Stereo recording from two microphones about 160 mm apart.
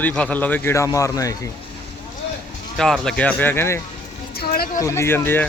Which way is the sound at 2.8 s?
5° left (ahead or behind).